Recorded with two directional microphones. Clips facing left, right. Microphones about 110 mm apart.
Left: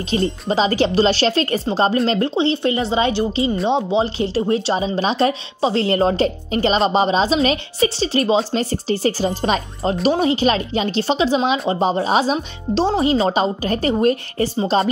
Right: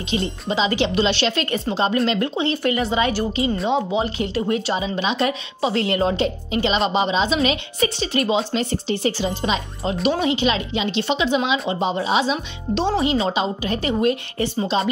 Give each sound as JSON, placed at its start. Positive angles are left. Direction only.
{"t": 0.1, "sound": "speech", "side_deg": 40}
{"t": 14.7, "sound": "music", "side_deg": 45}